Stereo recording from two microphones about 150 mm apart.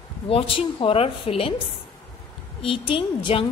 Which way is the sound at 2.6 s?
35° left (ahead or behind).